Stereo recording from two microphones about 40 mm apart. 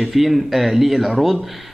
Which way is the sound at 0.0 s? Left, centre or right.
Centre.